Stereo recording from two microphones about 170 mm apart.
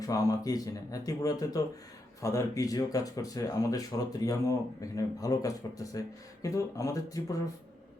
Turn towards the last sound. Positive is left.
turn(degrees=20)  # may be behind; listen again after turning